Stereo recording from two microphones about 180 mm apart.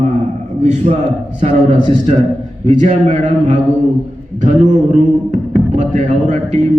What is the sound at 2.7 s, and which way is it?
A man's voice, 40° right (ahead or behind).